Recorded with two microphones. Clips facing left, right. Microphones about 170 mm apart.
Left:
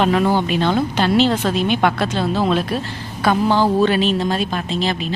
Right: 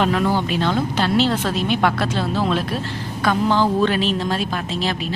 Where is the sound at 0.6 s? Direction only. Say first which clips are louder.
Left 2 dB; 20° left (ahead or behind).